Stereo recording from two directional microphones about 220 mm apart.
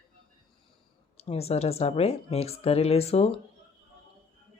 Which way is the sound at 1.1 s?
25° left (ahead or behind).